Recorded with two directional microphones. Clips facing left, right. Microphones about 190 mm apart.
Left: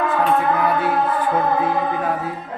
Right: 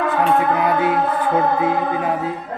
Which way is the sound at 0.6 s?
20° right (ahead or behind).